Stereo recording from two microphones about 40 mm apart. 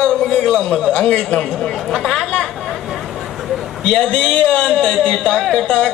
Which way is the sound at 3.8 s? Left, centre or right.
Centre.